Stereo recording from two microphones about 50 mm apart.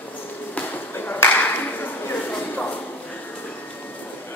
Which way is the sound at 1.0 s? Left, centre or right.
Left.